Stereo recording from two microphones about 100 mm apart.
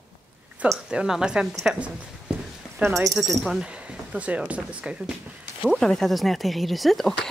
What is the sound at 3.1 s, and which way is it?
Speech, centre (ahead or behind).